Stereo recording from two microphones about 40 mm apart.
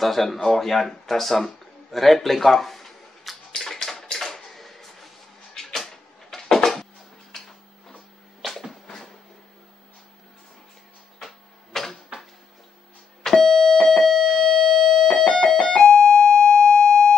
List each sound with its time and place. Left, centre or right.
0.0 s speech: centre
3.5 s a sound: centre
7.3 s tick-tock: centre
8.4 s a sound: centre
8.8 s a sound: centre
11.1 s printer: centre
13.2 s beep: centre
13.8 s alarm: centre
15.0 s music: centre